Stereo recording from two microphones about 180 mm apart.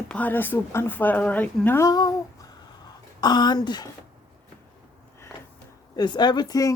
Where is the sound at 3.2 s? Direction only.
25° left (ahead or behind).